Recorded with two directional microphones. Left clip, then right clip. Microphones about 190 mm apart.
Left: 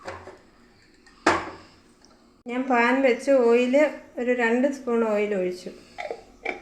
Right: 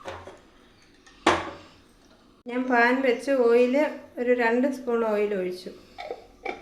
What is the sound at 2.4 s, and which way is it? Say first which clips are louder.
A woman's voice: even; 25° left (ahead or behind).